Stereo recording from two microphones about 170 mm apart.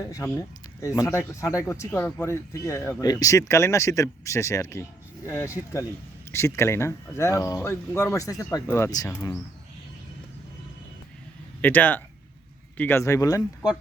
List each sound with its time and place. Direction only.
0.0 s speech: 20° left (ahead or behind)
11.6 s speech: 10° left (ahead or behind)